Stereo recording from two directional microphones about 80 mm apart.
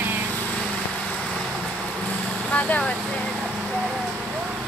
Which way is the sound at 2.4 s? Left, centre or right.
Centre.